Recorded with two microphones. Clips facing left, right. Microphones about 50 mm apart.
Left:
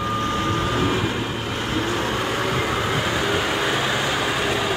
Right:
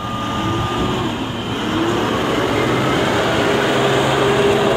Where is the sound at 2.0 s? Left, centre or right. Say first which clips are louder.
Right 6 dB; right.